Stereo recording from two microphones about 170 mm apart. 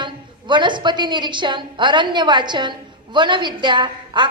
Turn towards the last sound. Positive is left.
turn(degrees=-25)  # may be behind; listen again after turning